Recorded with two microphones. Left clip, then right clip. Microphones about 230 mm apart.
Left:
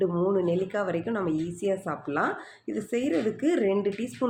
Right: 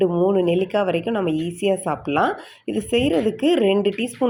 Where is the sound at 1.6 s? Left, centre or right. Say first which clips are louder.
Right 9 dB; right.